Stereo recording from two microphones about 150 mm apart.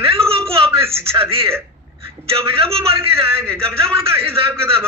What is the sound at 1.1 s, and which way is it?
A man's voice, 40° right (ahead or behind).